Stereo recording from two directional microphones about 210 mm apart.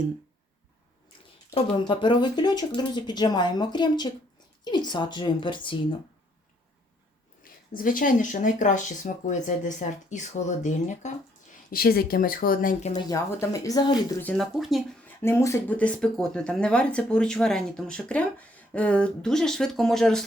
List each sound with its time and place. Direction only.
1.5 s speech: 20° left (ahead or behind)
7.4 s speech: 40° left (ahead or behind)
11.7 s speech: 45° left (ahead or behind)
13.0 s speech: 15° left (ahead or behind); by 15.1 s centre (ahead or behind)
15.2 s speech: 10° left (ahead or behind)